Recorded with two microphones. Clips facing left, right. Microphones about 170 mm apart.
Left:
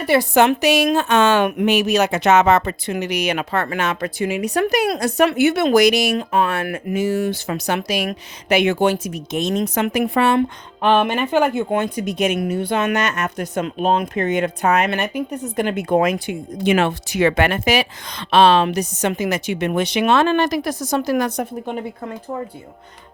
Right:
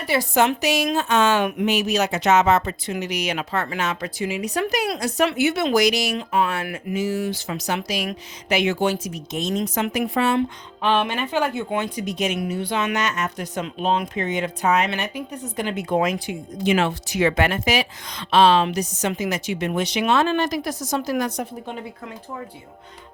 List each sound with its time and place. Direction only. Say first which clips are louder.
0.0 s speech: left 5 dB; 60° left (ahead or behind)